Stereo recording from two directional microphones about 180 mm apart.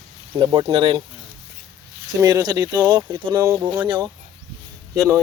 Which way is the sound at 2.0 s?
25° right (ahead or behind).